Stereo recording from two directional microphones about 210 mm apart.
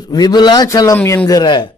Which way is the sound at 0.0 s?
20° left (ahead or behind).